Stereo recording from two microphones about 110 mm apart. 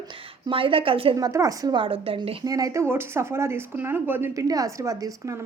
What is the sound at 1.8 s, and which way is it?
Speech, 55° right (ahead or behind).